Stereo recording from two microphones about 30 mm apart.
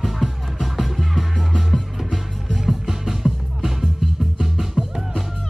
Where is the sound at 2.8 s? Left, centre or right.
Centre.